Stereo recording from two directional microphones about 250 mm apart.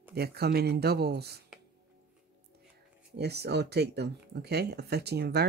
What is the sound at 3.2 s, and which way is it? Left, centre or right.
Speech, right.